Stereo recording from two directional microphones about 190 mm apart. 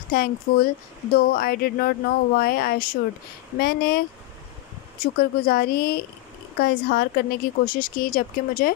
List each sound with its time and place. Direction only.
0.1 s a woman's voice: 50° left (ahead or behind)
5.2 s a woman's voice: 55° left (ahead or behind)